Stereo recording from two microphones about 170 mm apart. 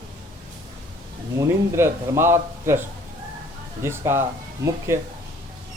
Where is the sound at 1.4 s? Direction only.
15° right (ahead or behind).